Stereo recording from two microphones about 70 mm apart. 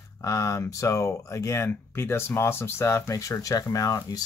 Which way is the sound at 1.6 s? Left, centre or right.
Left.